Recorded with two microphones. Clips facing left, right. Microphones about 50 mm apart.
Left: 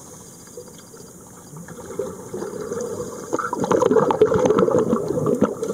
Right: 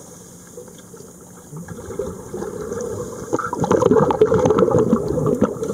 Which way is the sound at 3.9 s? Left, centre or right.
Centre.